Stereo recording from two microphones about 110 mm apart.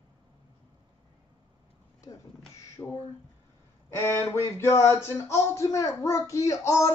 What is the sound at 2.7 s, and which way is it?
Speech, 20° left (ahead or behind).